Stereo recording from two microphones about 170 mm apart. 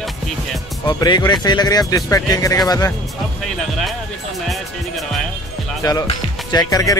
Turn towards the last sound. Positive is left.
turn(degrees=20)  # may be behind; listen again after turning